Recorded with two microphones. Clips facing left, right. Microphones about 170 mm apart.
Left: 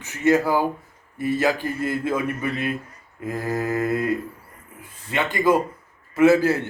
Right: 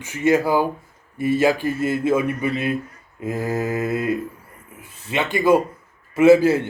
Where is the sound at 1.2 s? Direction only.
25° right (ahead or behind).